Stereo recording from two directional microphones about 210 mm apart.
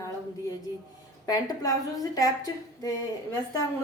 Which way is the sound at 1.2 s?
15° left (ahead or behind).